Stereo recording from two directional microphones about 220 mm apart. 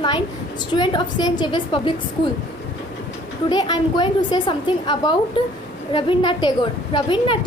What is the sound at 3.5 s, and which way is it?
A woman's voice, 20° left (ahead or behind).